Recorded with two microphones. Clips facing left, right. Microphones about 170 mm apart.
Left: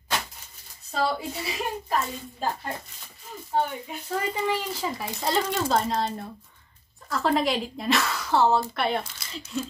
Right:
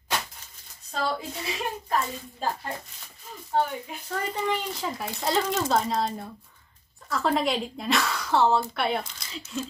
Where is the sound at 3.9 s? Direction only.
5° left (ahead or behind).